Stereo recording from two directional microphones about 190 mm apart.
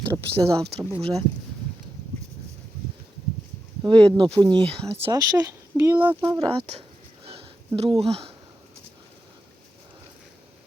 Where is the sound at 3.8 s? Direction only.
25° right (ahead or behind).